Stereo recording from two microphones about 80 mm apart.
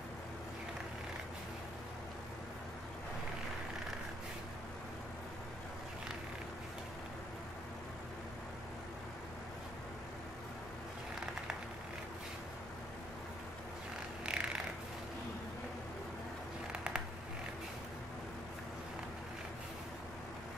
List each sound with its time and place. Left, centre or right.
14.2 s cat: centre